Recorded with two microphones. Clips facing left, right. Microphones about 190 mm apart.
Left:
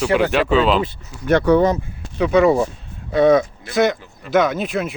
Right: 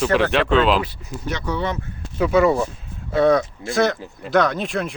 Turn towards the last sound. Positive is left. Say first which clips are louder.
# left 2 dB
turn(degrees=5)  # may be behind; listen again after turning